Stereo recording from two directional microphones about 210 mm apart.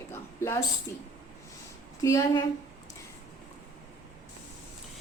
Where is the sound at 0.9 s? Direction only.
15° left (ahead or behind).